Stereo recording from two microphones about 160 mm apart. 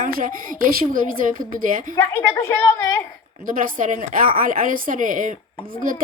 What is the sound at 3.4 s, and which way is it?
A woman's voice, 55° right (ahead or behind).